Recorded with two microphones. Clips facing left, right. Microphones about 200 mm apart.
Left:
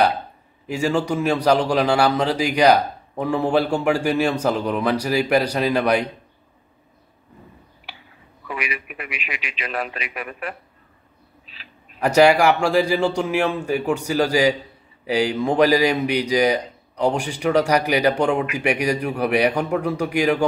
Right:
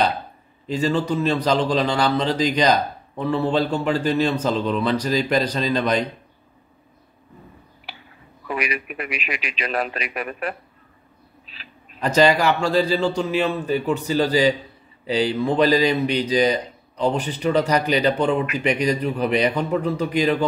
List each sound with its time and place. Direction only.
0.7 s a man's voice: 10° left (ahead or behind)
8.5 s a man's voice: 40° right (ahead or behind)
12.0 s a man's voice: 10° left (ahead or behind)